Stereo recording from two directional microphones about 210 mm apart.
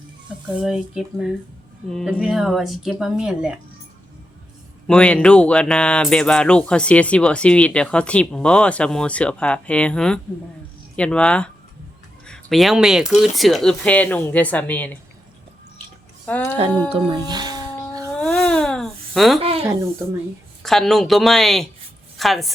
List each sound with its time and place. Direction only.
0.6 s speech: 5° right (ahead or behind)
4.9 s speech: 5° left (ahead or behind)
16.2 s speech: 5° left (ahead or behind)
16.9 s speech: 20° right (ahead or behind)
18.2 s a sound: 5° left (ahead or behind)
19.4 s speech: 25° right (ahead or behind)
20.6 s speech: centre (ahead or behind)